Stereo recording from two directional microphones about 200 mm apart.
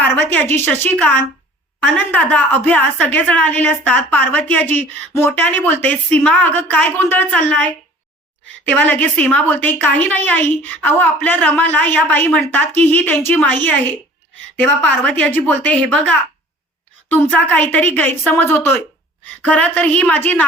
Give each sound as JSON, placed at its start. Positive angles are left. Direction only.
{"t": 0.0, "sound": "a woman's voice", "side_deg": 10}
{"t": 8.7, "sound": "a woman's voice", "side_deg": 10}